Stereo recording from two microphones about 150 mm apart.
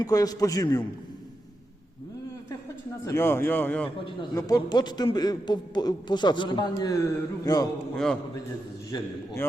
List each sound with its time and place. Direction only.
0.0 s a man's voice: 25° left (ahead or behind)
3.0 s a man's voice: 20° left (ahead or behind)
4.4 s a man's voice: 25° left (ahead or behind)
7.9 s a man's voice: 5° left (ahead or behind)
8.9 s a man's voice: 20° left (ahead or behind)